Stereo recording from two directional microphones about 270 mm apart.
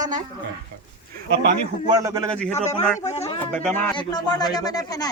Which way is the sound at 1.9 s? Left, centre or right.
Centre.